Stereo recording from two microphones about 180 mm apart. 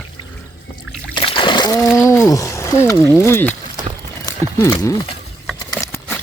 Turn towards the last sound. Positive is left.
turn(degrees=15)  # may be behind; listen again after turning